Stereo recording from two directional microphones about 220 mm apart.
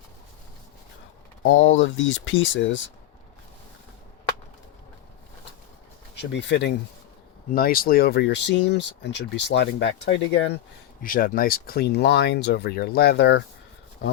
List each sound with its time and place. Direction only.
1.5 s speech: 60° left (ahead or behind)
6.3 s speech: 55° left (ahead or behind)
7.5 s speech: 40° left (ahead or behind)
11.0 s speech: 40° left (ahead or behind)